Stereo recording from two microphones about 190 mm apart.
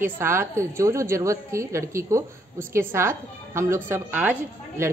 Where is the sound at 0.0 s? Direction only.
10° right (ahead or behind).